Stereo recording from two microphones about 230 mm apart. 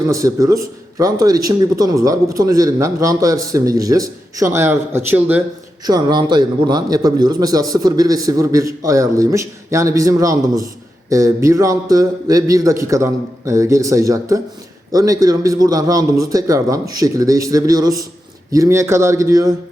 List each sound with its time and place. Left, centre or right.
0.1 s a man's voice: centre